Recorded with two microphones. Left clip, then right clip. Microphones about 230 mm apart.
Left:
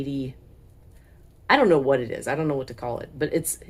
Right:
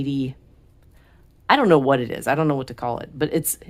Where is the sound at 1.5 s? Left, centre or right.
Right.